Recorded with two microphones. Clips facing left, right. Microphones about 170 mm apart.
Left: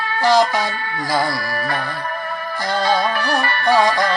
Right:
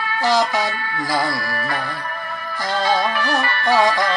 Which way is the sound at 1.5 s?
35° left (ahead or behind).